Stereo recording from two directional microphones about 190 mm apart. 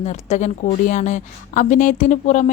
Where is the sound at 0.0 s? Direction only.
35° left (ahead or behind).